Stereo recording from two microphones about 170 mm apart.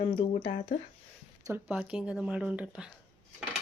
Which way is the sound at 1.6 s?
5° right (ahead or behind).